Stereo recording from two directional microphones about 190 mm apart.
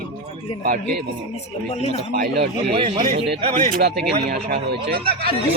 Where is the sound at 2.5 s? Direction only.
30° right (ahead or behind).